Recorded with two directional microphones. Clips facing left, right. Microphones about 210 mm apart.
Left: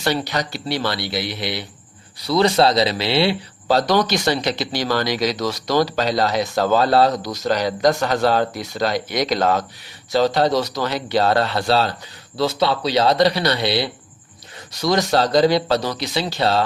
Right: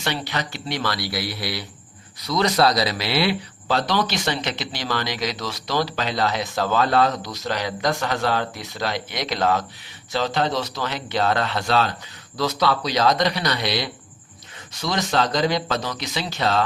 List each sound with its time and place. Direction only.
0.0 s speech: 40° left (ahead or behind)